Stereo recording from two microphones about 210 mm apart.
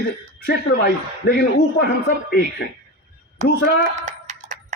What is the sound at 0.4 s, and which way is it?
A man's voice, 50° left (ahead or behind).